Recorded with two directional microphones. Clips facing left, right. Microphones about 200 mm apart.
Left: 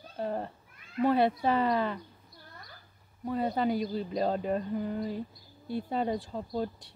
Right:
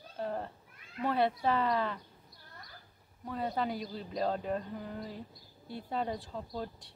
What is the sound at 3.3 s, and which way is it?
Speech, 5° left (ahead or behind).